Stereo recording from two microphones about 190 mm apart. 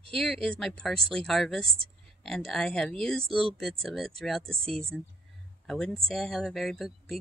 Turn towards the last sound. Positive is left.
turn(degrees=0)  # may be behind; listen again after turning